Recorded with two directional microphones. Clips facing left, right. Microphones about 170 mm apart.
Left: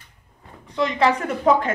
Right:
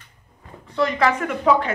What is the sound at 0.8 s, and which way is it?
Speech, 25° left (ahead or behind).